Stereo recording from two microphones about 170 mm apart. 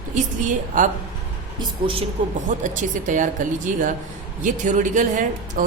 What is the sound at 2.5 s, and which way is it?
Speech, 50° right (ahead or behind).